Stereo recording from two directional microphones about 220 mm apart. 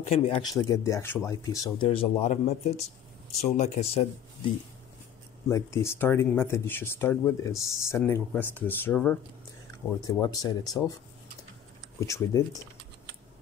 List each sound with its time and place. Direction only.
0.1 s speech: 20° left (ahead or behind)
1.9 s speech: 30° left (ahead or behind)
5.5 s speech: 10° left (ahead or behind)
12.0 s speech: 15° left (ahead or behind)